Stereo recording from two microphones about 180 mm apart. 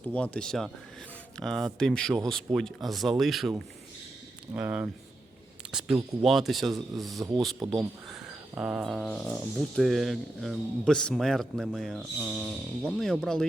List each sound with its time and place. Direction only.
0.0 s speech: 10° left (ahead or behind)
4.5 s speech: 10° right (ahead or behind)
7.2 s speech: 20° right (ahead or behind)
8.0 s speech: 5° right (ahead or behind)